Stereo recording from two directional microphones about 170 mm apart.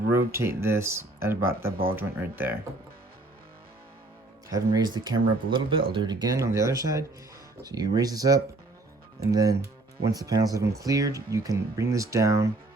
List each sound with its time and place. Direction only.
0.3 s speech: 15° right (ahead or behind)
4.4 s speech: 20° right (ahead or behind)